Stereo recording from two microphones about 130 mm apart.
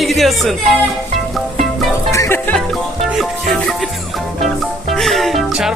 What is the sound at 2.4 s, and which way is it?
Speech, 10° left (ahead or behind).